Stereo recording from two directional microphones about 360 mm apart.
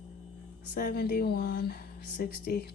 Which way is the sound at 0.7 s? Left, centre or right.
Left.